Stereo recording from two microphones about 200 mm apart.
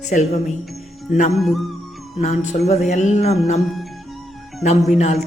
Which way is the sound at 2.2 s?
35° left (ahead or behind).